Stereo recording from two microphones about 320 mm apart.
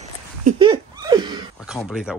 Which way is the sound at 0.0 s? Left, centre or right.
Centre.